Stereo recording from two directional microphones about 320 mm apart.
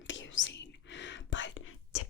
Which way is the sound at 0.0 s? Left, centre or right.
Left.